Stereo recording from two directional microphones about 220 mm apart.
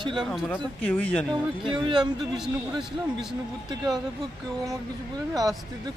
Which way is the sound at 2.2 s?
Centre (ahead or behind).